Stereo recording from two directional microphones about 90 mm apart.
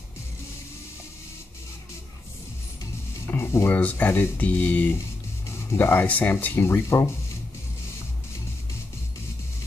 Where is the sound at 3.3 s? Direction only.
25° left (ahead or behind).